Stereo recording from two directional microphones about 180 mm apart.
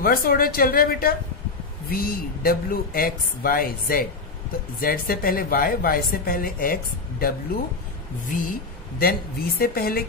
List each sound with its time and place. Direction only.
0.0 s speech: 55° left (ahead or behind)